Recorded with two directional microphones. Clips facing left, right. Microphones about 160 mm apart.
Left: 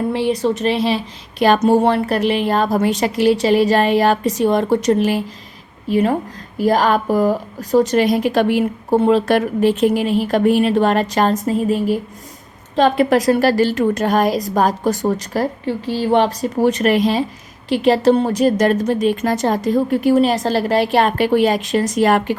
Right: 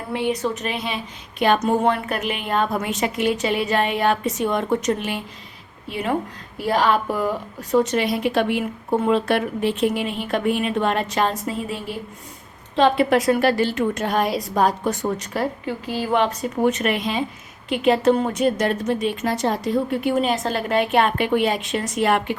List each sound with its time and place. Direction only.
0.1 s a woman's voice: 30° left (ahead or behind)